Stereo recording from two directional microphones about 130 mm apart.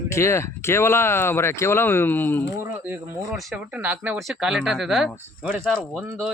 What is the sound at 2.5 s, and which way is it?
Speech, 15° right (ahead or behind).